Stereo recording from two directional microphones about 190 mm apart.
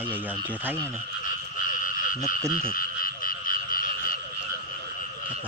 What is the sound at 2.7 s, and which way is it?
Croak, 50° left (ahead or behind).